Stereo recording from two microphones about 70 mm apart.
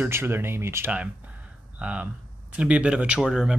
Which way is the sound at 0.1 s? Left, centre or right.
Right.